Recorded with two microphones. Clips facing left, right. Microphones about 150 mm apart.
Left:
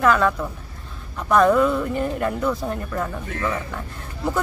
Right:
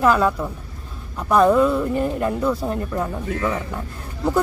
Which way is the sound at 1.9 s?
30° right (ahead or behind).